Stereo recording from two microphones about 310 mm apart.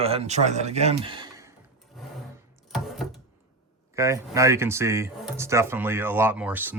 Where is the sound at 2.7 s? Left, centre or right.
Centre.